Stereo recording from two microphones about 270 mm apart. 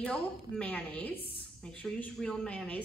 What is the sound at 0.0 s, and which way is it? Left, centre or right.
A woman's voice, centre.